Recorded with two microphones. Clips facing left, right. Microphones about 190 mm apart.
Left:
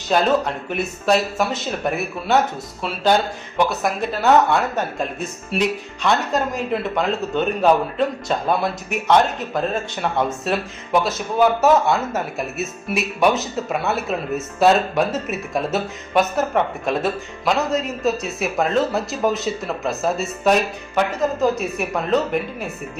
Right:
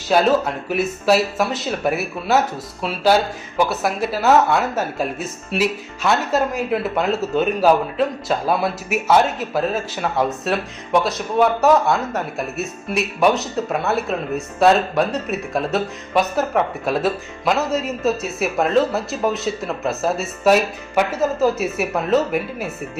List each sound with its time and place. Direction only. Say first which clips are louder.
0.1 s speech: right 2 dB; 5° right (ahead or behind)